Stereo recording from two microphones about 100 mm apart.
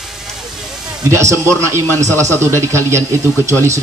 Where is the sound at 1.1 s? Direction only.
30° right (ahead or behind).